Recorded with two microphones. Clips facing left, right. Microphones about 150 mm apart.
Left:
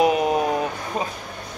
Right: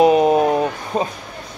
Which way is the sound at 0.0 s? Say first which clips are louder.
Right 6 dB; 30° right (ahead or behind).